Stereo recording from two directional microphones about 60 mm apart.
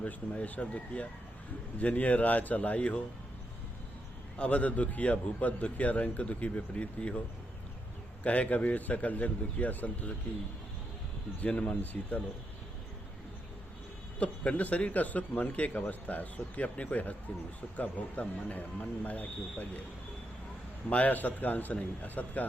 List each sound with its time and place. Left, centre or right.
0.0 s a man's voice: left
4.4 s a man's voice: left
8.2 s a man's voice: left
11.3 s a man's voice: left
14.2 s a man's voice: left
20.9 s a man's voice: left